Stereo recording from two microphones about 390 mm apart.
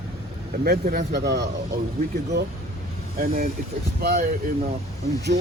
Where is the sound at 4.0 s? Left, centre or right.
Right.